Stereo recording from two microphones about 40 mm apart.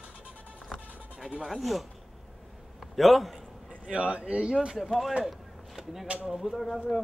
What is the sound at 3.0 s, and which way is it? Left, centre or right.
Speech, centre.